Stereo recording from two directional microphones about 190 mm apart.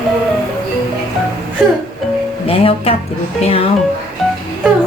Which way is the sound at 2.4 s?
30° left (ahead or behind).